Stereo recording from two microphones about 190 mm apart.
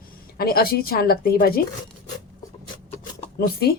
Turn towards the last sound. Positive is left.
turn(degrees=55)  # may be behind; listen again after turning